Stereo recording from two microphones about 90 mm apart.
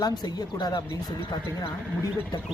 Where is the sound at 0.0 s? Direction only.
45° left (ahead or behind).